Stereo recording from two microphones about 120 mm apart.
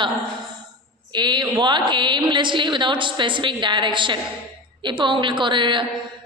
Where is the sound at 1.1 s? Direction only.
40° right (ahead or behind).